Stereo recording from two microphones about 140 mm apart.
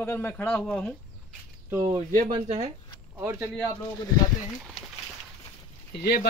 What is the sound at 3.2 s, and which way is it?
Speech, 15° right (ahead or behind).